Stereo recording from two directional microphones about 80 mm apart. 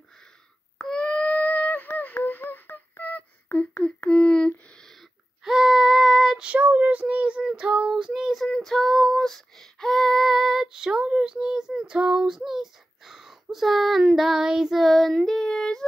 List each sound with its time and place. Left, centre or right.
0.7 s a sound: centre
5.4 s child singing: centre
6.4 s child singing: centre